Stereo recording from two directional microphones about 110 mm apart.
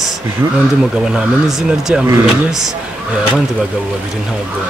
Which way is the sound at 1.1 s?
5° right (ahead or behind).